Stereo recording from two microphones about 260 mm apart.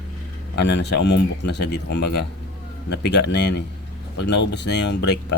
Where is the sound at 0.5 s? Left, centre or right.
Left.